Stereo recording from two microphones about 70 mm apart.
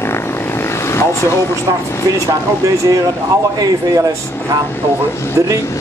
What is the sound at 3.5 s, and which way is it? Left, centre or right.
Speech, right.